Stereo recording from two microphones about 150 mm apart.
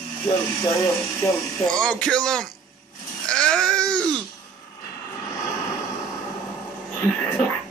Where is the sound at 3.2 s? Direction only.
5° left (ahead or behind).